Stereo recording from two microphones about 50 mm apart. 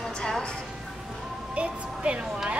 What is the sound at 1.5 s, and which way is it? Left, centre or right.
Speech, right.